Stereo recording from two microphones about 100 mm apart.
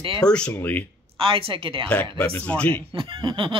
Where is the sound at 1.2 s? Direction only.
65° right (ahead or behind).